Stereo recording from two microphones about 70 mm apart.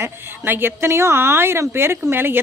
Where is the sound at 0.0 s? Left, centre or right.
Right.